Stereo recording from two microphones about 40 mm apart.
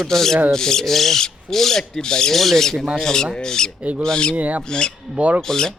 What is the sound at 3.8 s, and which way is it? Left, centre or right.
Speech, right.